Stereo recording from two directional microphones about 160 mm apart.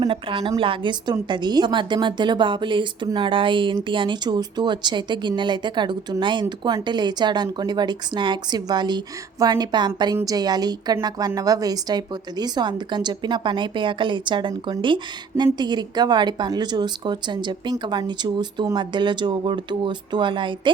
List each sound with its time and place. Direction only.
0.0 s a woman's voice: 35° right (ahead or behind)